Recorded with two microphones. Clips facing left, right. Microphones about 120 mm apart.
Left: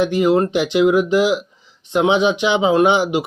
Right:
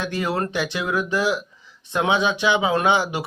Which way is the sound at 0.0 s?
15° left (ahead or behind).